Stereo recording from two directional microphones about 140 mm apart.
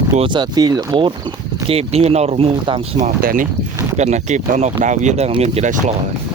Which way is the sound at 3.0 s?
80° right.